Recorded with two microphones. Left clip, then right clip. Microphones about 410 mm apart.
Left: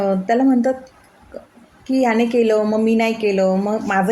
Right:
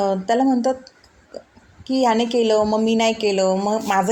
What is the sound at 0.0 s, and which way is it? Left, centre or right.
Speech, left.